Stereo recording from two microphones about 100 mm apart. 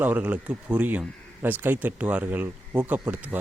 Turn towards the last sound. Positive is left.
turn(degrees=-15)  # may be behind; listen again after turning